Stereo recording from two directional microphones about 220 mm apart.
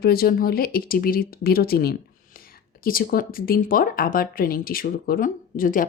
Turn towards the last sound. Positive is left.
turn(degrees=40)  # may be behind; listen again after turning